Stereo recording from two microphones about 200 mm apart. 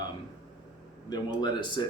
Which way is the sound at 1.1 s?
20° left (ahead or behind).